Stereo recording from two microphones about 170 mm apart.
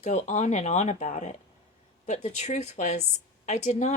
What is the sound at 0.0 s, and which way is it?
A woman's voice, 45° left (ahead or behind).